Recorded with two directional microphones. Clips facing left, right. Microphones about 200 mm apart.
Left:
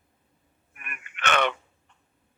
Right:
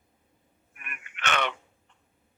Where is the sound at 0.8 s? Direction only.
50° left (ahead or behind).